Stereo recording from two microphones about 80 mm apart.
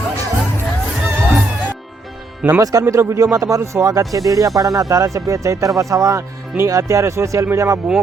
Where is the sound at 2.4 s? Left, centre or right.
Centre.